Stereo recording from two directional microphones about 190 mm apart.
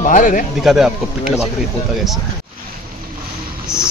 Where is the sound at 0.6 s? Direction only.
Centre (ahead or behind).